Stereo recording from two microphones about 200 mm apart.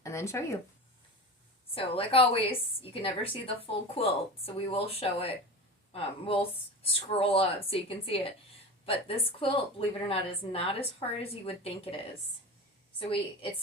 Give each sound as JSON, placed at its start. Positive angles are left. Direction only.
{"t": 0.0, "sound": "speech", "side_deg": 15}
{"t": 1.7, "sound": "speech", "side_deg": 25}
{"t": 13.0, "sound": "speech", "side_deg": 25}